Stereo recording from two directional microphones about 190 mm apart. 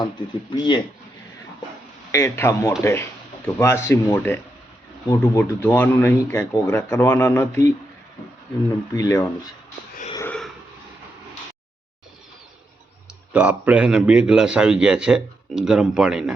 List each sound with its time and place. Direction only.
0.5 s speech: 25° left (ahead or behind)
2.1 s speech: 15° left (ahead or behind)
8.9 s speech: 15° left (ahead or behind)
10.2 s wheeze: 5° left (ahead or behind)
13.3 s a man's voice: 10° right (ahead or behind)